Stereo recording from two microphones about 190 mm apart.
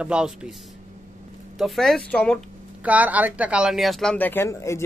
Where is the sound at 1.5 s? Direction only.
Centre (ahead or behind).